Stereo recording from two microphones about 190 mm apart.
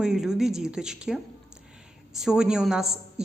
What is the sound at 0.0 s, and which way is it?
A woman's voice, 5° right (ahead or behind).